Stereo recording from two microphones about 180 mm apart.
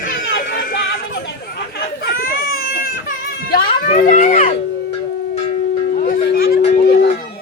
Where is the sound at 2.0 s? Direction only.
55° left (ahead or behind).